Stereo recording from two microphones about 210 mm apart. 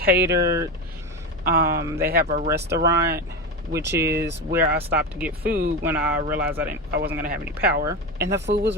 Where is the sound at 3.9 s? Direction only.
50° right (ahead or behind).